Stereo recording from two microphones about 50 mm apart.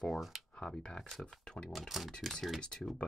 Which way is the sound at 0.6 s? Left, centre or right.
Centre.